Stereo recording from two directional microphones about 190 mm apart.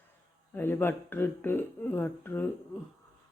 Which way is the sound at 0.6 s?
10° left (ahead or behind).